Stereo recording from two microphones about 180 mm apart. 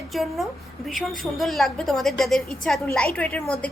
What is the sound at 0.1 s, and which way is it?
A woman's voice, centre (ahead or behind).